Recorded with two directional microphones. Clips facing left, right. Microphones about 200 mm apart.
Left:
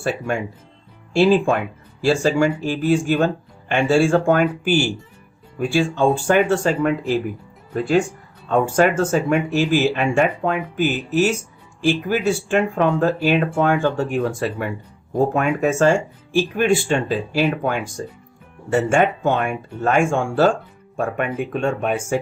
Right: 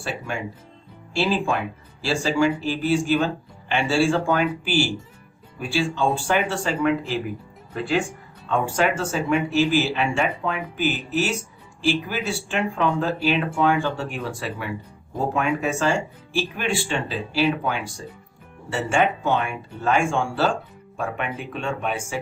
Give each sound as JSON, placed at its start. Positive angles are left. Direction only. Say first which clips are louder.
{"t": 0.0, "sound": "speech", "louder": "left 6 dB", "side_deg": 50}
{"t": 8.4, "sound": "speech", "louder": "left 5 dB", "side_deg": 45}